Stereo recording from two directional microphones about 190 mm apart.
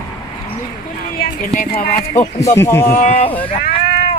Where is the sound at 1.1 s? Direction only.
50° left (ahead or behind).